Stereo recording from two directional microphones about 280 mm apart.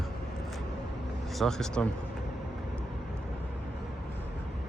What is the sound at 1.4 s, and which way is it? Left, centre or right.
Speech, centre.